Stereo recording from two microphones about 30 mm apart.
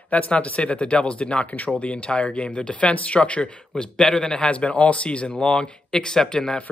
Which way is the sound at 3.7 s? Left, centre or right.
Left.